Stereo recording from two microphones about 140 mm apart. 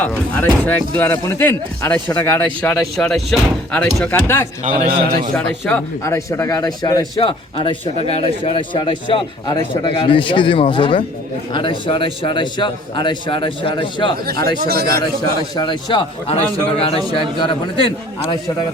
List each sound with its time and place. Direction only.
0.0 s speech: 10° left (ahead or behind)
4.6 s a man's voice: 80° right
5.3 s speech: 10° left (ahead or behind)
6.0 s speech: 20° left (ahead or behind)
7.2 s speech: 40° left (ahead or behind)
14.7 s a man's voice: 90° right
15.5 s speech: 35° left (ahead or behind)